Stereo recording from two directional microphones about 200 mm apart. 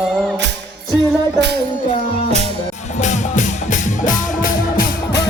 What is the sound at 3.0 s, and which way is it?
Music, 35° left (ahead or behind).